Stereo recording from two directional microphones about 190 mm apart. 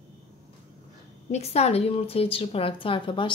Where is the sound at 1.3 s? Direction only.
35° left (ahead or behind).